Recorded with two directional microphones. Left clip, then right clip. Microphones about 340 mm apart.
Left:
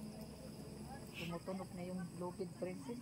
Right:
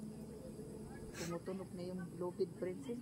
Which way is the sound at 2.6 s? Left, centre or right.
Centre.